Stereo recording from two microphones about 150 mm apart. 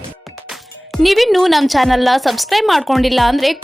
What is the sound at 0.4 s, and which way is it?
Speech, centre (ahead or behind).